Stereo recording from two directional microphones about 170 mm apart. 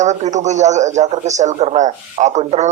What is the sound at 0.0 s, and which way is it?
Speech, 45° right (ahead or behind).